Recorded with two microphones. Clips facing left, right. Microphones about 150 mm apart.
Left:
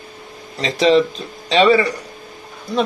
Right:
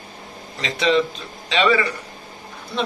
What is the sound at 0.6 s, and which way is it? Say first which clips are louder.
Speech: left 5 dB; 35° left (ahead or behind).